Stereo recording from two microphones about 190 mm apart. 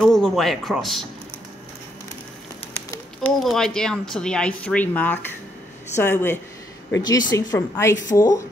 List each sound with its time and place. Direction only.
0.0 s speech: centre (ahead or behind)
3.2 s speech: centre (ahead or behind); by 8.5 s 15° left (ahead or behind)